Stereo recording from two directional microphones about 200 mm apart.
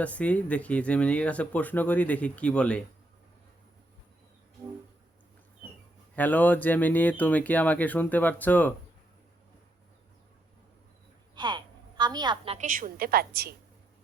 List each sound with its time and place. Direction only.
0.0 s speech: 5° left (ahead or behind)
6.1 s speech: 10° left (ahead or behind)
11.3 s a sound: 20° right (ahead or behind)
12.5 s a woman's voice: 40° right (ahead or behind)